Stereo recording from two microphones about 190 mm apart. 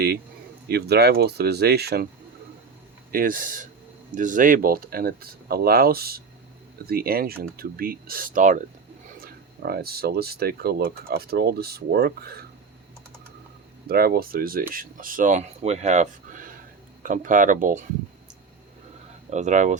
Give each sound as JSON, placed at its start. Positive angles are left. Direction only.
{"t": 0.7, "sound": "speech", "side_deg": -55}
{"t": 3.1, "sound": "speech", "side_deg": -50}
{"t": 13.8, "sound": "speech", "side_deg": -55}
{"t": 19.3, "sound": "speech", "side_deg": -40}